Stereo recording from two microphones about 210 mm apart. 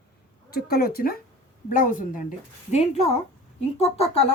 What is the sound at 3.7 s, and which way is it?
Speech, 30° left (ahead or behind).